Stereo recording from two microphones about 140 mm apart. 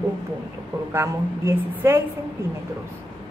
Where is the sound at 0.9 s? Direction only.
15° right (ahead or behind).